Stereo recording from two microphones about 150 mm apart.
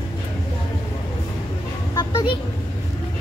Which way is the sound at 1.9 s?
25° left (ahead or behind).